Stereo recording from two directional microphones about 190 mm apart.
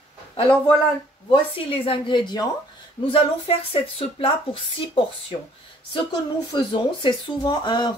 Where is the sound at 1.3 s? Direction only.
25° left (ahead or behind).